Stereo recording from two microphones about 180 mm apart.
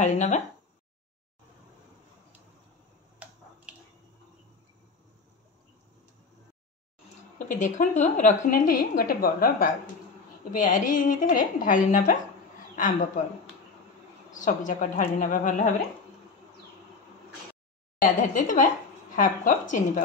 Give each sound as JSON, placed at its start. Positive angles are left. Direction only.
{"t": 0.0, "sound": "speech", "side_deg": 40}
{"t": 3.2, "sound": "finger snapping", "side_deg": -10}
{"t": 7.3, "sound": "a woman's voice", "side_deg": 45}
{"t": 14.3, "sound": "a woman's voice", "side_deg": 45}
{"t": 18.0, "sound": "a woman's voice", "side_deg": 50}